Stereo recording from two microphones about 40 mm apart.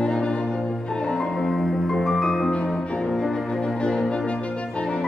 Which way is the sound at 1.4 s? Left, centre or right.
Centre.